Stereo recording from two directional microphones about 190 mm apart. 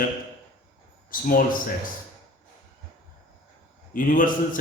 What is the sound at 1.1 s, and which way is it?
Speech, 50° left (ahead or behind).